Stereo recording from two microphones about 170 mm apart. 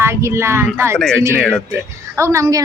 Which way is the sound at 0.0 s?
15° right (ahead or behind).